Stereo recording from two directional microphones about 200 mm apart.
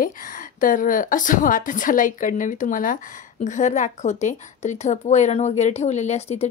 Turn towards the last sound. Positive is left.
turn(degrees=30)  # may be behind; listen again after turning